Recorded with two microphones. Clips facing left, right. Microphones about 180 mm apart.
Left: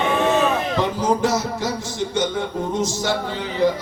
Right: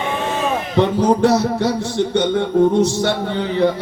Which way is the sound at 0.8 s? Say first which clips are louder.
Right 8 dB; 65° right (ahead or behind).